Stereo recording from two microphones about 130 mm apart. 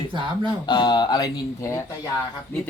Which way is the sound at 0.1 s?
40° right (ahead or behind).